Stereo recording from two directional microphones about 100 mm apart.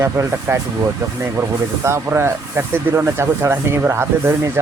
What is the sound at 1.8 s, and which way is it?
Speech, 25° right (ahead or behind).